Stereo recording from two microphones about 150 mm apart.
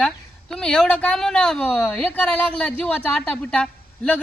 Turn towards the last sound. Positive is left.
turn(degrees=5)  # may be behind; listen again after turning